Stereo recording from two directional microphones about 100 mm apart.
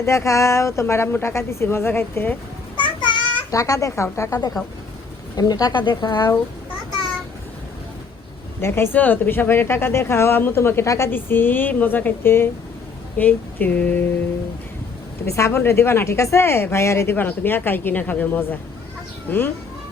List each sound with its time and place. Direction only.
0.0 s speech: 30° left (ahead or behind)
2.7 s child singing: 55° left (ahead or behind)
3.5 s speech: 35° left (ahead or behind); by 6.3 s 50° left (ahead or behind)
8.6 s speech: 25° left (ahead or behind)
13.1 s a sound: 15° left (ahead or behind)
15.4 s speech: 25° left (ahead or behind)